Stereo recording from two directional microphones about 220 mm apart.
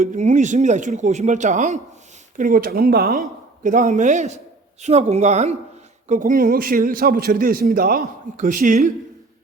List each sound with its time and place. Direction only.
0.0 s a man's voice: 30° right (ahead or behind)